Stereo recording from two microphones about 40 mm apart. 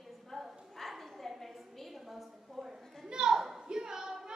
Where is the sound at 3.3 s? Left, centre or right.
Centre.